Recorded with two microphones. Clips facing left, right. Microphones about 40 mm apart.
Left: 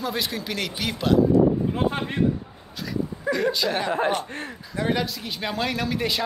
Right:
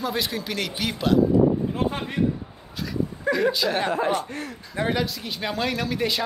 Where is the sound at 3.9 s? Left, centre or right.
Left.